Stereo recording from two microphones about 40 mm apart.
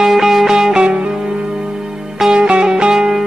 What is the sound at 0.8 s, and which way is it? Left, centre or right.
Music, right.